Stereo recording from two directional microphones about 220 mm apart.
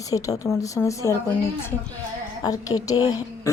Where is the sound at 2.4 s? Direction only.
15° left (ahead or behind).